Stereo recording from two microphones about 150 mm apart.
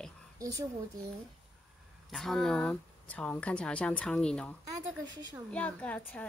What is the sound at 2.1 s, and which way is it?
Speech, centre (ahead or behind).